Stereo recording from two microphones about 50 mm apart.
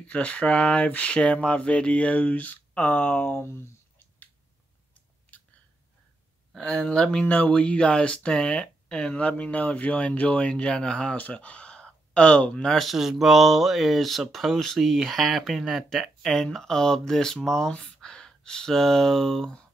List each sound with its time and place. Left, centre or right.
0.0 s speech: left
3.4 s a sound: left
6.6 s speech: left
12.6 s speech: centre
12.9 s speech: centre
15.9 s speech: centre